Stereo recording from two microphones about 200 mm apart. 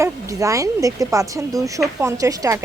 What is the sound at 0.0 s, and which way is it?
A woman's voice, 15° right (ahead or behind).